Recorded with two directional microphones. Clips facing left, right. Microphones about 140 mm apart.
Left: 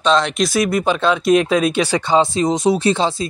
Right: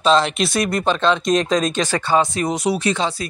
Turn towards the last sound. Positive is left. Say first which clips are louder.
# left 4 dB
turn(degrees=30)  # may be behind; listen again after turning